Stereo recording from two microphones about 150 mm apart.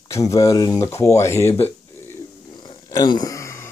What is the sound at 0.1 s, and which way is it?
Speech, 20° left (ahead or behind).